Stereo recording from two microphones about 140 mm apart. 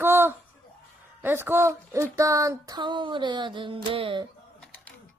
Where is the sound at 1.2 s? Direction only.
15° right (ahead or behind); by 4.2 s 40° right (ahead or behind).